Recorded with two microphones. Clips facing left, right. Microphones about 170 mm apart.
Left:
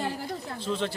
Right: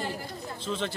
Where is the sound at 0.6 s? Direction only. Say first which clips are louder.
Left 2 dB; centre (ahead or behind).